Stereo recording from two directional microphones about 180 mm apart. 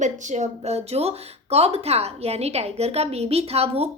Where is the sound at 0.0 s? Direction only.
40° right (ahead or behind).